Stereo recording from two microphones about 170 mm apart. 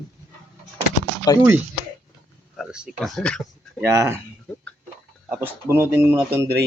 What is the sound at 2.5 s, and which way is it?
Speech, 5° right (ahead or behind).